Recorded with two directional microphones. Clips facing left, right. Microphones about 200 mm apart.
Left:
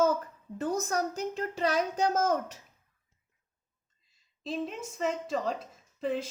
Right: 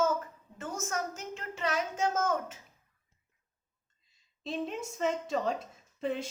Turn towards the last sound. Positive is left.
turn(degrees=0)  # may be behind; listen again after turning